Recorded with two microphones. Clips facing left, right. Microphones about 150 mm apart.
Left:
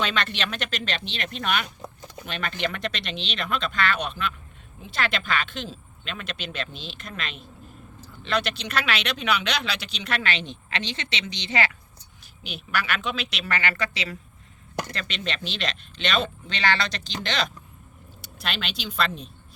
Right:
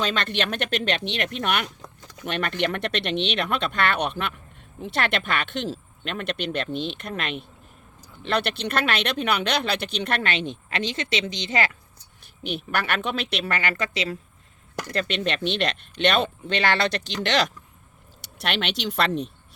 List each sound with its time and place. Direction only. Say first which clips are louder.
0.0 s speech: right 2 dB; 45° right (ahead or behind)
12.4 s speech: right 3 dB; 55° right (ahead or behind)
17.2 s speech: right 5 dB; 70° right (ahead or behind)